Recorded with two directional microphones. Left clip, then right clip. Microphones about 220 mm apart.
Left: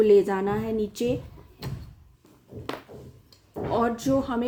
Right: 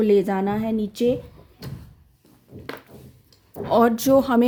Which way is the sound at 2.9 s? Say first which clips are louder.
Left 2 dB; 35° right (ahead or behind).